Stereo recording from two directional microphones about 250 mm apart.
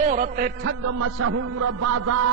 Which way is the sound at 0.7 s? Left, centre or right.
Right.